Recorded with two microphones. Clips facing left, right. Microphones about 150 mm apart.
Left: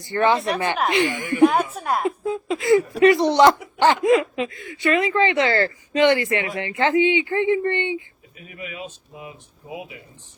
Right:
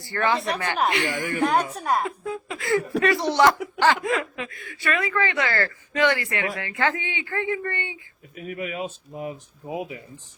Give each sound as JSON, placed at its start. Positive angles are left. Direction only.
{"t": 0.0, "sound": "speech", "side_deg": 20}
{"t": 0.3, "sound": "speech", "side_deg": 0}
{"t": 0.9, "sound": "speech", "side_deg": 20}
{"t": 1.5, "sound": "speech", "side_deg": 5}
{"t": 2.0, "sound": "speech", "side_deg": 20}
{"t": 8.4, "sound": "speech", "side_deg": -50}